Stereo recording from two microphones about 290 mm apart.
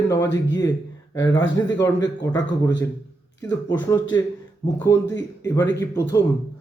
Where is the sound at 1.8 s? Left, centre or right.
Centre.